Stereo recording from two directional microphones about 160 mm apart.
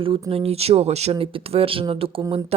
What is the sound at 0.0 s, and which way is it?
Speech, 35° right (ahead or behind).